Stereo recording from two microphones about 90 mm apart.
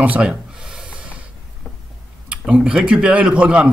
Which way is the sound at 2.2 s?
10° right (ahead or behind).